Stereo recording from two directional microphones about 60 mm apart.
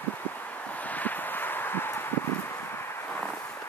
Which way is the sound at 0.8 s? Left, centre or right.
Left.